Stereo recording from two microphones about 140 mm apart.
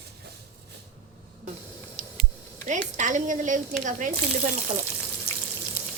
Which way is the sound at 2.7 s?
65° right (ahead or behind).